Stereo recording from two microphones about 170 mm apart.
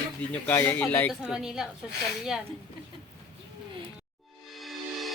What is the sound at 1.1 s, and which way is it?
Speech, 5° right (ahead or behind).